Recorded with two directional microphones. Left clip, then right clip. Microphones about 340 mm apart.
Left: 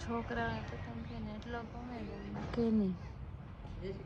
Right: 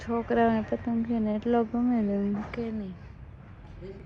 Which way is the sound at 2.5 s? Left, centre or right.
Centre.